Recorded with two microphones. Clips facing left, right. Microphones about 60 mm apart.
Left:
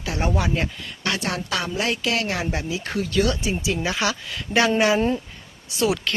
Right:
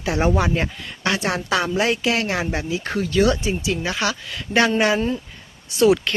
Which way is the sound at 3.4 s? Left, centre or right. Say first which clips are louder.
Right 1 dB; centre.